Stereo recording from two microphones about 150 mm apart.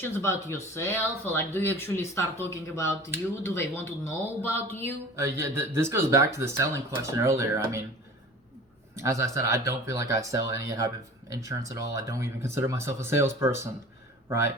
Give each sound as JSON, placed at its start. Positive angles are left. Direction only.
{"t": 0.0, "sound": "speech", "side_deg": 20}
{"t": 5.1, "sound": "speech", "side_deg": -20}
{"t": 9.0, "sound": "speech", "side_deg": -20}